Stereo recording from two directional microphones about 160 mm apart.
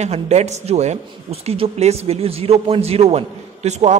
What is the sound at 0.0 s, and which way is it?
A man's voice, 45° right (ahead or behind).